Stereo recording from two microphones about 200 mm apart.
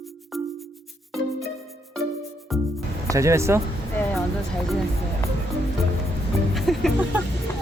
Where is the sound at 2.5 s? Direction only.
Centre (ahead or behind).